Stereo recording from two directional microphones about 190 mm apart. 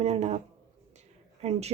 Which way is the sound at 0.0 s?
35° right (ahead or behind).